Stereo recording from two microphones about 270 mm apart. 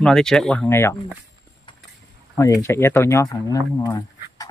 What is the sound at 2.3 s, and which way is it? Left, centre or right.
Speech, centre.